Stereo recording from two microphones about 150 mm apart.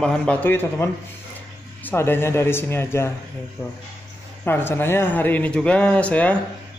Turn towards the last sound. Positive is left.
turn(degrees=10)  # may be behind; listen again after turning